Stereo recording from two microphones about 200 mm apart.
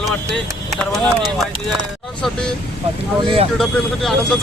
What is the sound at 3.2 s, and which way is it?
Speech, 30° right (ahead or behind).